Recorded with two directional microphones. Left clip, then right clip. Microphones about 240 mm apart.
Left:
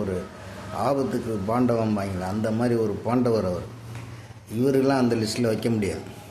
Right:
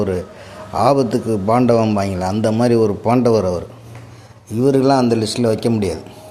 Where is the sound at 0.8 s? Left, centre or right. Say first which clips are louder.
Right 10 dB; right.